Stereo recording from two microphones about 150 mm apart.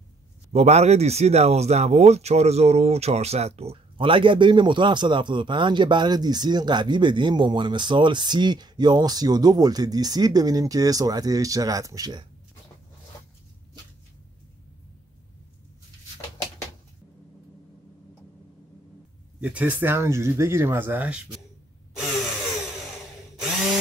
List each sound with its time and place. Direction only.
0.5 s speech: 45° right (ahead or behind); by 12.3 s 25° right (ahead or behind)
19.4 s speech: 10° right (ahead or behind)